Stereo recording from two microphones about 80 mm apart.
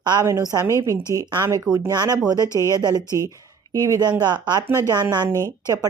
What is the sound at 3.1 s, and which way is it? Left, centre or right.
Speech, left.